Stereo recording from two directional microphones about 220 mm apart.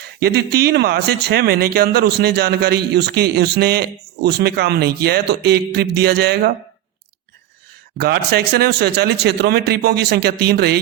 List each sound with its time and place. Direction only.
0.2 s speech: 45° right (ahead or behind)
7.9 s speech: 45° right (ahead or behind)